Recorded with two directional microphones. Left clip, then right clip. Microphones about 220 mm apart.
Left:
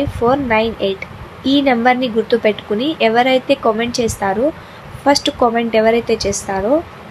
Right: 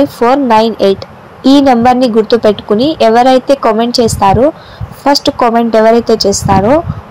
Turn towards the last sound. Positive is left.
turn(degrees=-15)  # may be behind; listen again after turning